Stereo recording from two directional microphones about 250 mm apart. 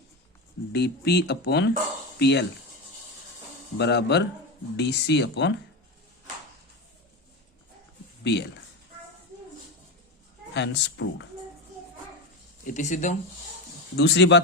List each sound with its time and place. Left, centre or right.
0.7 s speech: left
3.8 s speech: left
8.2 s speech: left
10.5 s speech: left
12.6 s speech: left
13.9 s speech: left